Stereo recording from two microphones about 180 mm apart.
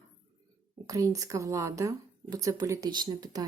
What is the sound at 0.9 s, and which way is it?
Speech, 20° right (ahead or behind).